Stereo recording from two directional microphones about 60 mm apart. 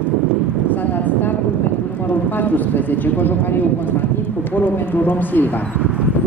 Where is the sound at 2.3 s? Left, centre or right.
Left.